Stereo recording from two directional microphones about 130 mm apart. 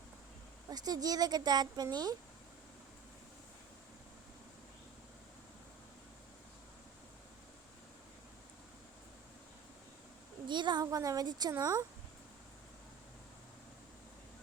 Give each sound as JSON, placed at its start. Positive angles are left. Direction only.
{"t": 0.7, "sound": "speech", "side_deg": -30}
{"t": 10.4, "sound": "speech", "side_deg": -35}